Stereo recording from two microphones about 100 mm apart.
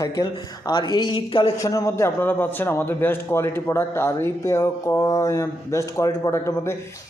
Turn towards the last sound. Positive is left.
turn(degrees=30)  # may be behind; listen again after turning